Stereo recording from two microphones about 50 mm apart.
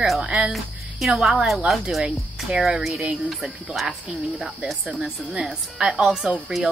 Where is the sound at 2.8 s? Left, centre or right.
Centre.